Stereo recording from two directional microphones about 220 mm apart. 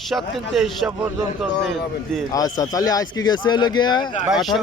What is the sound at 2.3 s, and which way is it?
A man's voice, 15° left (ahead or behind).